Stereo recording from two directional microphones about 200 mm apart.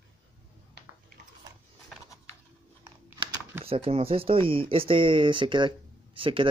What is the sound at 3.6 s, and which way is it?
Speech, 30° right (ahead or behind).